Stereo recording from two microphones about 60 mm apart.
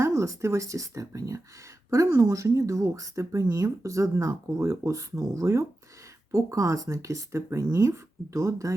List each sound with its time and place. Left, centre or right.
0.0 s speech: right